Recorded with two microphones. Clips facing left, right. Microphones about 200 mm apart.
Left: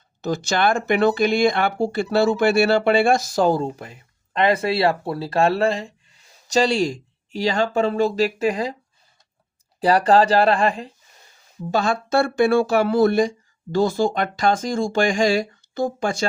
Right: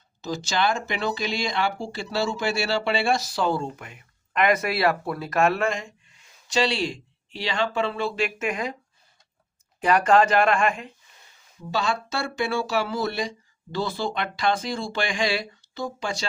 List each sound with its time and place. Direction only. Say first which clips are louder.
0.2 s speech: left 5 dB; 55° left (ahead or behind); by 8.7 s 35° left (ahead or behind)
9.8 s speech: left 3 dB; 35° left (ahead or behind)
11.7 s speech: left 7 dB; 50° left (ahead or behind)